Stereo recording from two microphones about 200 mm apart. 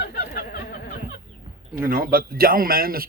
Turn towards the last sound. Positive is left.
turn(degrees=-45)  # may be behind; listen again after turning